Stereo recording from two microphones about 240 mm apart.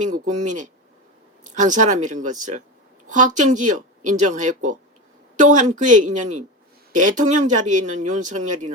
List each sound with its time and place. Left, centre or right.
0.0 s speech: right